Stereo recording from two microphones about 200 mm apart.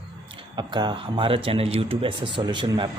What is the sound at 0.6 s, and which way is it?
Speech, 20° right (ahead or behind).